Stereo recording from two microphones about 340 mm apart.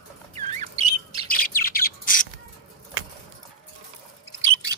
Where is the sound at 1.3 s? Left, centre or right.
Left.